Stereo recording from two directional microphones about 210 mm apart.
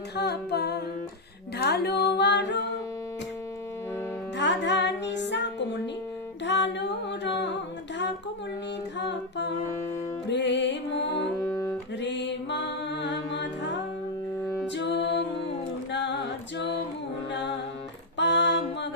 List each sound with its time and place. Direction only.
0.2 s music: 50° left (ahead or behind)
4.4 s music: 55° left (ahead or behind)
6.4 s a sound: 55° left (ahead or behind)
9.0 s music: 55° left (ahead or behind)
11.3 s music: 10° left (ahead or behind)
11.9 s music: 55° left (ahead or behind)
14.8 s music: 55° left (ahead or behind)
18.2 s a sound: 55° left (ahead or behind)